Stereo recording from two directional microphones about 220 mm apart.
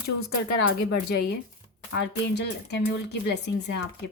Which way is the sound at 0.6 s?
50° left (ahead or behind).